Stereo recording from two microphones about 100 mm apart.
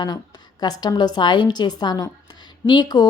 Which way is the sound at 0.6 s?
45° left (ahead or behind).